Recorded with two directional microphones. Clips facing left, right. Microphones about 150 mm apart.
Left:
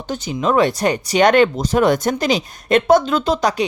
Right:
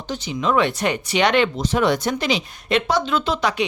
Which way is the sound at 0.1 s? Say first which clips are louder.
Left 3 dB; 45° left (ahead or behind).